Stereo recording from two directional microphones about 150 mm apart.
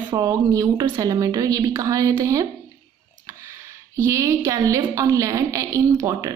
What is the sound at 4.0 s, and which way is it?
A woman's voice, 20° right (ahead or behind).